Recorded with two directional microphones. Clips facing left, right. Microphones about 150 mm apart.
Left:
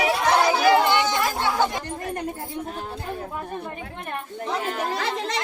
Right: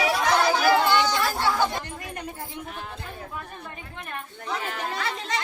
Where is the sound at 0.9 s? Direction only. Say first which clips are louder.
Left 1 dB; 20° left (ahead or behind).